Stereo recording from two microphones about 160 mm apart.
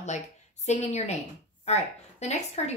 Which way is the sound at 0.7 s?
45° left (ahead or behind).